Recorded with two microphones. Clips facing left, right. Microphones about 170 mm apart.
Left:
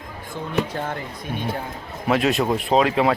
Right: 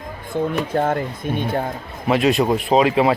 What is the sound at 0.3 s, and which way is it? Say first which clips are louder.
Speech: right 5 dB; 55° right (ahead or behind).